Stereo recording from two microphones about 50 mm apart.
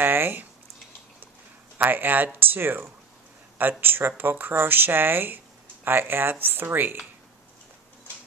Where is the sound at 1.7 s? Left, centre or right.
Right.